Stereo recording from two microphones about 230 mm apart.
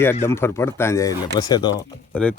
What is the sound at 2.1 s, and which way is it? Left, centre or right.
Speech, centre.